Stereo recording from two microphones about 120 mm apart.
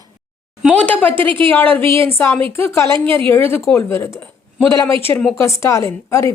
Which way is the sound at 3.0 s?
45° right (ahead or behind).